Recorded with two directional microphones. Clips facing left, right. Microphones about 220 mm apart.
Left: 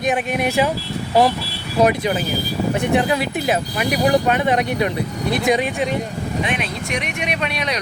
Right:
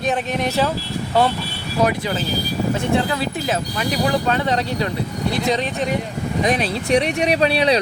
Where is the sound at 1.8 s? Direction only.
20° left (ahead or behind).